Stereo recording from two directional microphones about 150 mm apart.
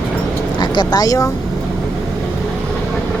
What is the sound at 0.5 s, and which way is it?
Speech, 30° left (ahead or behind).